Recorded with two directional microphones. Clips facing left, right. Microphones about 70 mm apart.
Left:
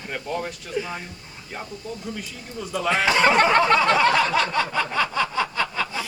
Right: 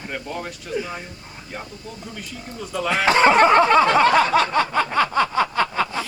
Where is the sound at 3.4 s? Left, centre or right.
Right.